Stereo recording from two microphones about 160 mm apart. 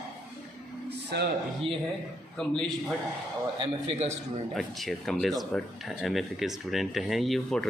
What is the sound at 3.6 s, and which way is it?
Speech, 40° right (ahead or behind).